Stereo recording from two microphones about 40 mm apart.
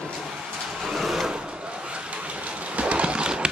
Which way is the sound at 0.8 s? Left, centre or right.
Centre.